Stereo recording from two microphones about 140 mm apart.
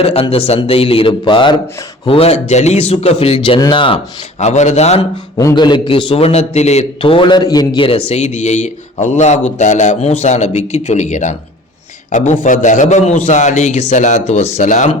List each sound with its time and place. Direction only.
0.0 s a man's voice: 45° left (ahead or behind)
4.4 s a man's voice: 55° left (ahead or behind)
5.5 s a man's voice: 35° left (ahead or behind); by 14.9 s 60° left (ahead or behind)